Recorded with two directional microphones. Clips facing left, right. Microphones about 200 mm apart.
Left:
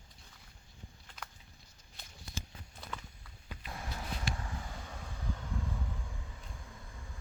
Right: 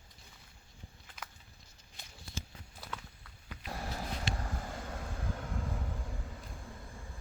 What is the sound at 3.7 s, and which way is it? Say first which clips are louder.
Vehicle: right 3 dB; 35° right (ahead or behind).